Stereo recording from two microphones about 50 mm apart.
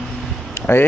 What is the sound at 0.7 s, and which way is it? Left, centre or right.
Speech, left.